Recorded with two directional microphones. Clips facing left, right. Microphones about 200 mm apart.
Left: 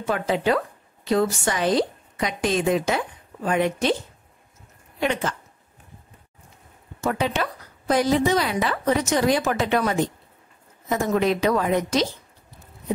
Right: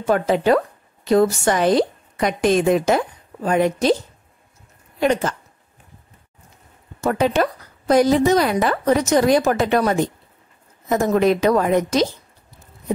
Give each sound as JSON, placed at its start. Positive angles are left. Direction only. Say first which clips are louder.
{"t": 0.0, "sound": "speech", "louder": "right 5 dB", "side_deg": -45}
{"t": 3.4, "sound": "a woman's voice", "louder": "right 4 dB", "side_deg": -40}
{"t": 5.0, "sound": "a woman's voice", "louder": "right 6 dB", "side_deg": -40}
{"t": 7.1, "sound": "speech", "louder": "right 6 dB", "side_deg": -45}